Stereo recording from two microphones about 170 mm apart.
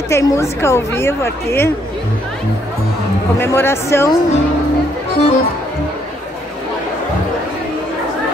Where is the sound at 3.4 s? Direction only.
15° left (ahead or behind).